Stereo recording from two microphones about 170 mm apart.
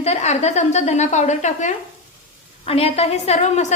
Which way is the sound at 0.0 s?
40° left (ahead or behind).